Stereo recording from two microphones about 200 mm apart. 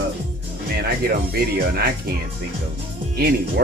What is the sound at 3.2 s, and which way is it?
Speech, 55° right (ahead or behind).